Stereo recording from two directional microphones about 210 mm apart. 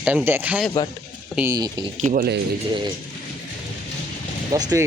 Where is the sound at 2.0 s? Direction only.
35° right (ahead or behind).